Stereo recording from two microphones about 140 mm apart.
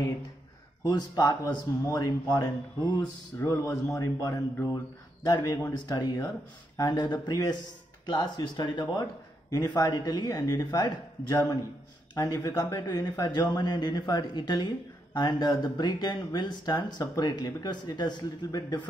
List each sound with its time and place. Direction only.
0.8 s speech: 30° left (ahead or behind)